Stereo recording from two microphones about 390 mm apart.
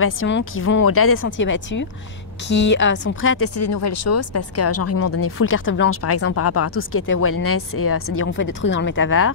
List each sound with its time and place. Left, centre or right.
0.0 s speech: left